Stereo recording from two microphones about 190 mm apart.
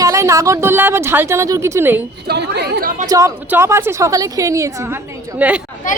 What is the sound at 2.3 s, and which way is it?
Speech, 60° right (ahead or behind).